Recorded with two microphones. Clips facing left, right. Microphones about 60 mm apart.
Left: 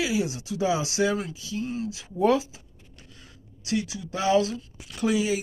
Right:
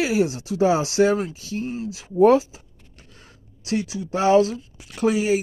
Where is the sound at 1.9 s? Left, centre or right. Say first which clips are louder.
Right 8 dB; right.